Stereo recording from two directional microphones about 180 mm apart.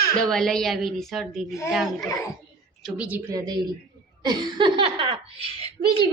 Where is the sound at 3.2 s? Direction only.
20° right (ahead or behind).